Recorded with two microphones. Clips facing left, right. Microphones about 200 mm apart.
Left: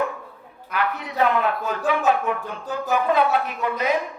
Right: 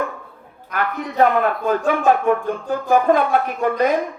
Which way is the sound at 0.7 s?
50° right (ahead or behind).